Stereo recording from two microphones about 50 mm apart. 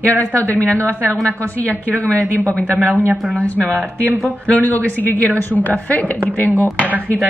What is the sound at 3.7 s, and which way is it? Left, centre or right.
Speech, right.